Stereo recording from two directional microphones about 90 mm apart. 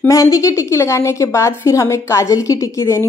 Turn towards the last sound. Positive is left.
turn(degrees=30)  # may be behind; listen again after turning